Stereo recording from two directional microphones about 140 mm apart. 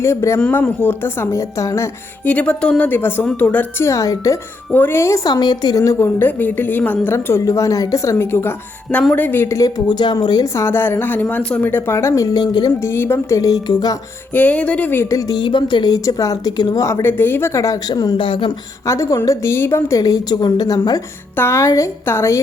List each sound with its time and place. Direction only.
0.0 s a woman's voice: 20° left (ahead or behind)
0.3 s a woman's voice: 10° left (ahead or behind)
2.3 s a woman's voice: 10° left (ahead or behind); by 12.9 s 30° left (ahead or behind)
12.9 s a woman's voice: 15° left (ahead or behind)
14.3 s a woman's voice: 10° left (ahead or behind); by 18.5 s 35° left (ahead or behind)
18.9 s a woman's voice: 25° left (ahead or behind)